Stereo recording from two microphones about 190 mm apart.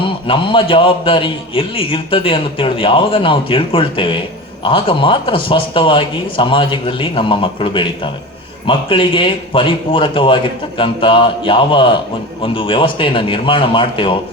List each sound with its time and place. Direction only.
0.0 s a man's voice: 25° left (ahead or behind)